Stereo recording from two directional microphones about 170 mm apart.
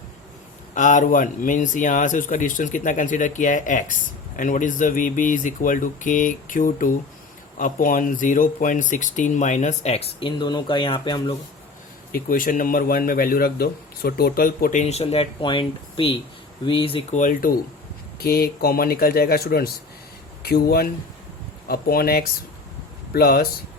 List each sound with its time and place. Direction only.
0.7 s speech: 50° left (ahead or behind); by 11.3 s 30° left (ahead or behind)
12.1 s speech: 55° left (ahead or behind); by 17.2 s 30° left (ahead or behind)
17.2 s speech: 50° left (ahead or behind)
18.2 s speech: 65° left (ahead or behind)